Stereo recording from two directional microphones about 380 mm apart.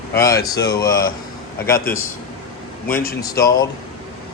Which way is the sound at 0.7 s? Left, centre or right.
Centre.